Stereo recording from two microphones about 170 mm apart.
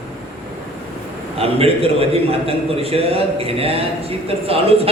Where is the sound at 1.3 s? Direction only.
35° right (ahead or behind).